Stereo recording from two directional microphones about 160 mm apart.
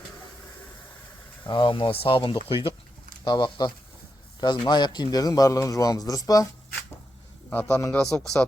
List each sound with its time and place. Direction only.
1.5 s a man's voice: 30° left (ahead or behind)
7.5 s a man's voice: 10° left (ahead or behind)